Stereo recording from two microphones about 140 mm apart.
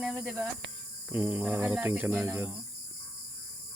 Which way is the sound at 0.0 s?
Centre (ahead or behind).